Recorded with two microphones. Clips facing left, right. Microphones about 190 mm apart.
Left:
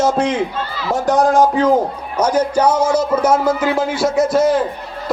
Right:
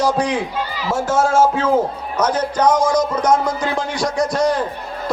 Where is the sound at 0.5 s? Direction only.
15° right (ahead or behind).